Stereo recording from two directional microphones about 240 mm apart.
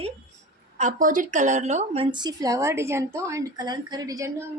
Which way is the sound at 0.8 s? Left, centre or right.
Right.